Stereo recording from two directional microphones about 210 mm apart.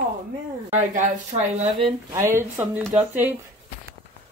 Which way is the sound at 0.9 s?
35° right (ahead or behind).